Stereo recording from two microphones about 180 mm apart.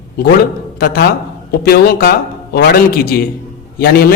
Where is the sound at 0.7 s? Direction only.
60° left (ahead or behind).